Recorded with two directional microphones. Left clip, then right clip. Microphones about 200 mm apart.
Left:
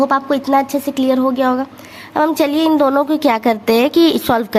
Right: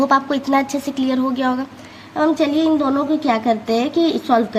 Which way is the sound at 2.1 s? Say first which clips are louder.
Left 2 dB; 35° left (ahead or behind).